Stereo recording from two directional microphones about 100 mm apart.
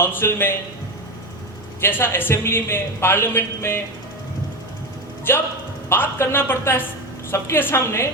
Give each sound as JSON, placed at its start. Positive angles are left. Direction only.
{"t": 0.0, "sound": "a man's voice", "side_deg": 25}
{"t": 1.8, "sound": "a man's voice", "side_deg": 20}
{"t": 5.3, "sound": "a man's voice", "side_deg": 20}